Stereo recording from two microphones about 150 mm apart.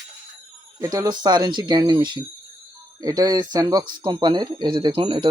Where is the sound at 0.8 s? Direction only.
20° right (ahead or behind).